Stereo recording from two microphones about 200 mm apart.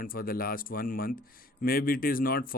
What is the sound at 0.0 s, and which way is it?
Speech, 45° left (ahead or behind).